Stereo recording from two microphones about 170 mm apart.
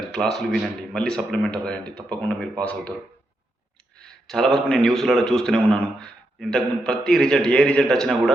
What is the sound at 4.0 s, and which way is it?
A man's voice, 5° left (ahead or behind).